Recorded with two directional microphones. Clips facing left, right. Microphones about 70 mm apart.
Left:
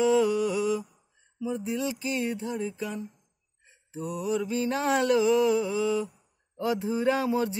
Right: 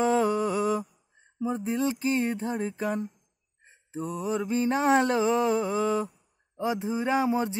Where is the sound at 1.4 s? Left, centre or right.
Right.